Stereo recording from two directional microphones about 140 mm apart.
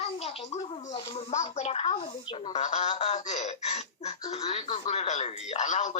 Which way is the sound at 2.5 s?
55° left (ahead or behind).